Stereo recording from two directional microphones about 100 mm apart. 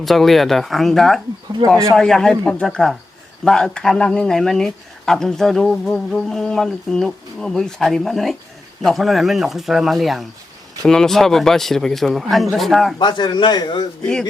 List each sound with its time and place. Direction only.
0.0 s speech: centre (ahead or behind)
13.0 s speech: 50° left (ahead or behind)
14.0 s speech: 5° left (ahead or behind)